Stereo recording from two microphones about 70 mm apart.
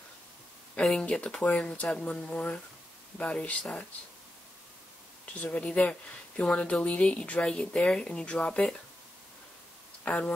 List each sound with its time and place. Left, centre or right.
1.0 s speech: centre
5.2 s speech: centre
10.0 s speech: centre